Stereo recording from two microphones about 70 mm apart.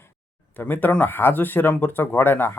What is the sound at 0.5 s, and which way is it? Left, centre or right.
Speech, left.